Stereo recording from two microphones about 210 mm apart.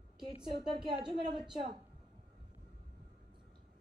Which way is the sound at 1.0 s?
20° right (ahead or behind).